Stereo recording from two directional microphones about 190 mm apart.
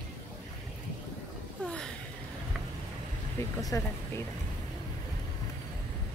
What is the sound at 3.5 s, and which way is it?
Speech, 15° left (ahead or behind).